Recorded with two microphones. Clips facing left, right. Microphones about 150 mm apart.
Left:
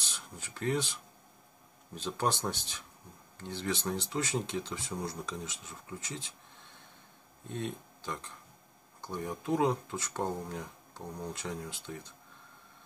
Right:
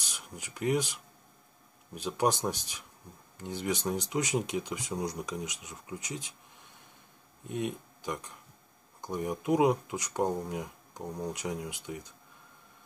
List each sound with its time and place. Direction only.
0.0 s speech: 15° right (ahead or behind)
7.4 s speech: 15° right (ahead or behind)